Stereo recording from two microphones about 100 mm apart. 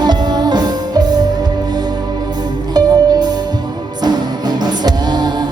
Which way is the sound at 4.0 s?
45° right (ahead or behind).